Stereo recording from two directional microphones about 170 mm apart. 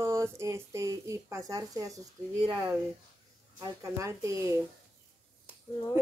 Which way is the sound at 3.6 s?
20° right (ahead or behind).